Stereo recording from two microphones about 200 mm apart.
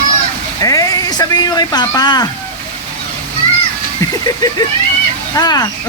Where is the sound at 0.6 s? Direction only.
15° left (ahead or behind).